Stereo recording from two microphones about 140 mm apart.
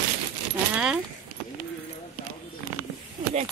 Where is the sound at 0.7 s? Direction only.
5° right (ahead or behind).